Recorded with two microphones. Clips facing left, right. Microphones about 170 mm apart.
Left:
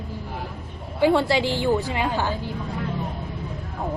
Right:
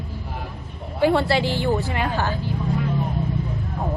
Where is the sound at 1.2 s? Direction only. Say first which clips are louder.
Even; 15° left (ahead or behind).